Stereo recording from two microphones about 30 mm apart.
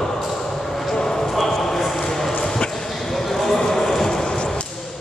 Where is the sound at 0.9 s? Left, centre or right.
Centre.